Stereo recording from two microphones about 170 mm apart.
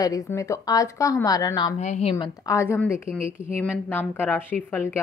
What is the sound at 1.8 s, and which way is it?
Speech, 40° left (ahead or behind).